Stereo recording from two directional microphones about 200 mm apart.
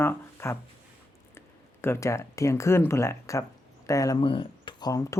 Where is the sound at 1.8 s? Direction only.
15° left (ahead or behind).